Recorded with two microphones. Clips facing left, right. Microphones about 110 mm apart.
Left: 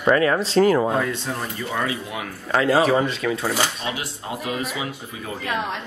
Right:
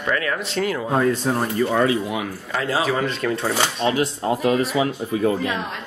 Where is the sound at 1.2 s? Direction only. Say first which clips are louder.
Right 8 dB; 45° right (ahead or behind).